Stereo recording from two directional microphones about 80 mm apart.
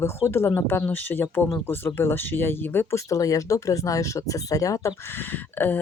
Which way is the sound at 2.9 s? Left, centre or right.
Left.